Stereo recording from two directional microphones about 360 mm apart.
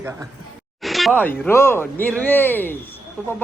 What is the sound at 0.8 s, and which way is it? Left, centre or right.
Speech, centre.